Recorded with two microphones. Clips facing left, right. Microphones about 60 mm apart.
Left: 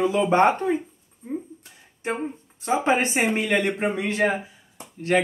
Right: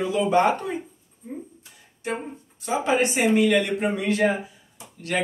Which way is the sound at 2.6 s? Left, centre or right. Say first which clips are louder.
Left 1 dB; left.